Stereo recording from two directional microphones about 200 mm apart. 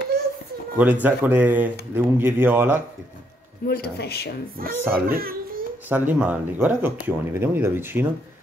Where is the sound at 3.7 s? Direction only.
55° left (ahead or behind).